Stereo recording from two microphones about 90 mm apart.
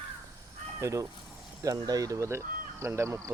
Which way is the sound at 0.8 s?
35° right (ahead or behind).